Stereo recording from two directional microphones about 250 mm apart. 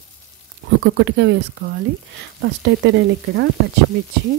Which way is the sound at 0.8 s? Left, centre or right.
Right.